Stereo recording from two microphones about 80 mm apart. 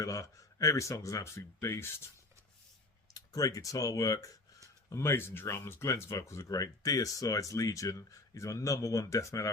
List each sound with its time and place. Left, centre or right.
0.0 s speech: left
3.1 s speech: left
4.9 s speech: left